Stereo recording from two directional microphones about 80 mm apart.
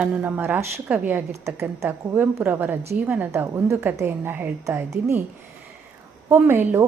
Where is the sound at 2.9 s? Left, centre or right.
Centre.